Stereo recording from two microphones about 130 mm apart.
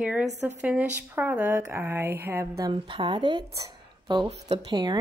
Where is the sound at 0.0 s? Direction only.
10° right (ahead or behind).